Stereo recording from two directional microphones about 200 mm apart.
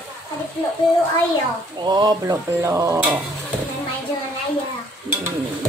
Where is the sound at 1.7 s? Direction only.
20° right (ahead or behind).